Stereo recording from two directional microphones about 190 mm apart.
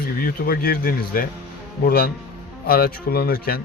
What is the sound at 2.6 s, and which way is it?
Speech, 50° left (ahead or behind).